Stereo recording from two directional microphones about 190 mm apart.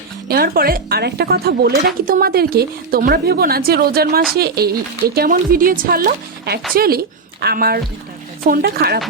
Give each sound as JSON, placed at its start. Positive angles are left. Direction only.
{"t": 0.3, "sound": "speech", "side_deg": -50}